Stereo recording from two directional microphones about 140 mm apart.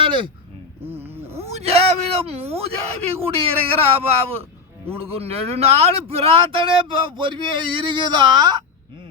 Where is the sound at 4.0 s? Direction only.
45° right (ahead or behind).